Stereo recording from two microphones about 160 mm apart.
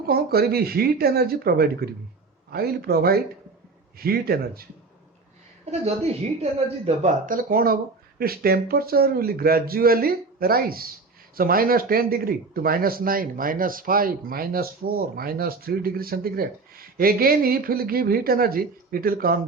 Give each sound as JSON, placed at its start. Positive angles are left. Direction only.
{"t": 0.1, "sound": "speech", "side_deg": -75}
{"t": 5.8, "sound": "speech", "side_deg": -40}
{"t": 7.3, "sound": "speech", "side_deg": -60}